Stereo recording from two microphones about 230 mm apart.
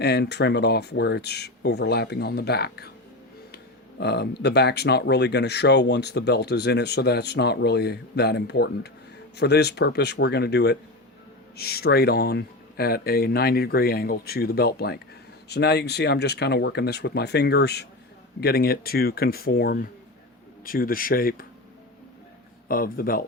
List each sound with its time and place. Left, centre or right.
0.0 s speech: left
4.0 s speech: left
22.7 s speech: left